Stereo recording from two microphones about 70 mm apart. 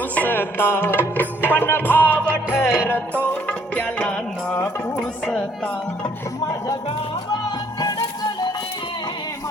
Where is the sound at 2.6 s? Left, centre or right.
Centre.